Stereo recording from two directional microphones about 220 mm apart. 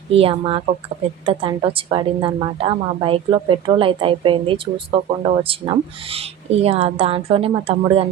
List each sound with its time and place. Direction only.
0.1 s a woman's voice: 25° right (ahead or behind)